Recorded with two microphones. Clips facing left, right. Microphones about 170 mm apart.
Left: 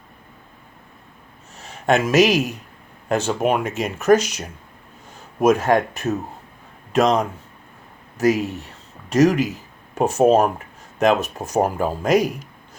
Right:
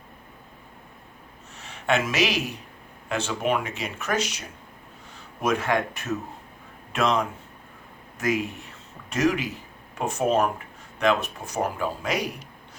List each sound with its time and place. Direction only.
1.5 s speech: 40° left (ahead or behind)